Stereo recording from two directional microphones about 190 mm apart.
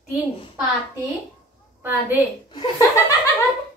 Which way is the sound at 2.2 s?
25° left (ahead or behind).